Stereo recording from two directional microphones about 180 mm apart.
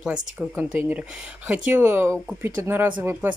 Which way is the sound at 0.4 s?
10° right (ahead or behind).